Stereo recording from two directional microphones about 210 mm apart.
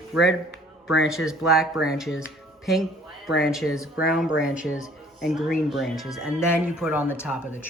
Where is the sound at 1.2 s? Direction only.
Centre (ahead or behind).